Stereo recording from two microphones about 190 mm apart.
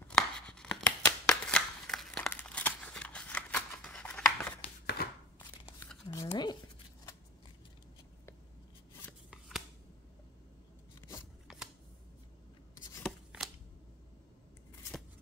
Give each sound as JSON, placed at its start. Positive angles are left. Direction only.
{"t": 0.1, "sound": "a sound", "side_deg": 5}
{"t": 4.8, "sound": "chopping", "side_deg": 55}
{"t": 6.2, "sound": "toothbrush", "side_deg": 25}
{"t": 11.0, "sound": "scissors", "side_deg": 15}
{"t": 11.4, "sound": "shuffling cards", "side_deg": -5}
{"t": 13.0, "sound": "shuffling cards", "side_deg": 0}